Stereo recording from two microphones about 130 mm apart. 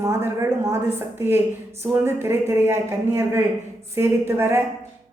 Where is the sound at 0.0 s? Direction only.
20° right (ahead or behind).